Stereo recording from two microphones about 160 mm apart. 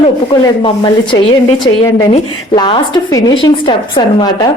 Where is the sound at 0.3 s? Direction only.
30° left (ahead or behind).